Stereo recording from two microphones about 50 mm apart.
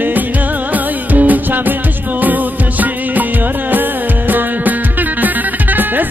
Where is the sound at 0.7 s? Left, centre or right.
Right.